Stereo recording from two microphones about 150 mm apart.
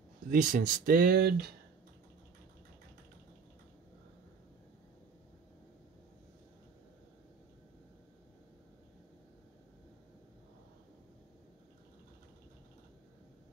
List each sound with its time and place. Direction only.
0.3 s speech: 65° right (ahead or behind); by 1.5 s 90° right